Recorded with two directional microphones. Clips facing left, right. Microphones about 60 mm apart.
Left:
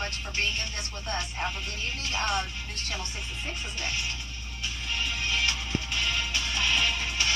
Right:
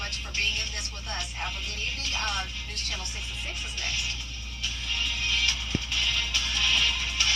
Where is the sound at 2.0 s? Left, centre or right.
Left.